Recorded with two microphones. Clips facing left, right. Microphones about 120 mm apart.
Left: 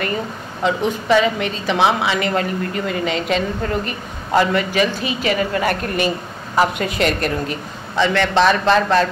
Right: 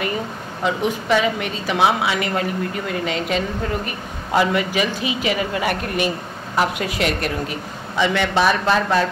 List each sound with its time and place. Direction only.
0.7 s a woman's voice: 5° right (ahead or behind)